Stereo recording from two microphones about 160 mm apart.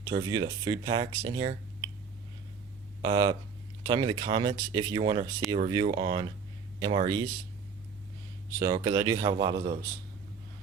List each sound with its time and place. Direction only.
0.1 s speech: 25° right (ahead or behind)
3.0 s speech: 30° right (ahead or behind)
8.5 s speech: 20° right (ahead or behind)